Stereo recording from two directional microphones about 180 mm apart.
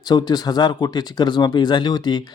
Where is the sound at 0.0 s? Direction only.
25° left (ahead or behind).